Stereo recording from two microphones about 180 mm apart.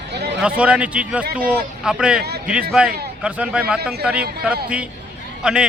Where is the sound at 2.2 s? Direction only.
65° right (ahead or behind).